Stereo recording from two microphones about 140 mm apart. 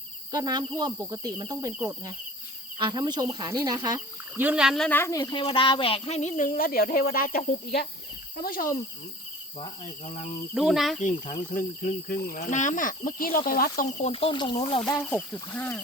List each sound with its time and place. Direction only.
0.3 s speech: 30° right (ahead or behind)
4.4 s speech: 10° right (ahead or behind)
4.9 s speech: 20° left (ahead or behind); by 8.6 s 90° left
10.5 s speech: centre (ahead or behind)
11.0 s speech: 65° left (ahead or behind); by 13.8 s 90° left
14.0 s speech: 45° left (ahead or behind)
15.1 s speech: 10° left (ahead or behind)